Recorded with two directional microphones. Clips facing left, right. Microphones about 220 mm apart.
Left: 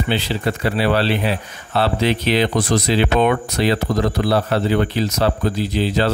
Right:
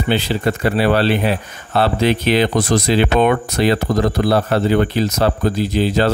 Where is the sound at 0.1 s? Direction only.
50° right (ahead or behind).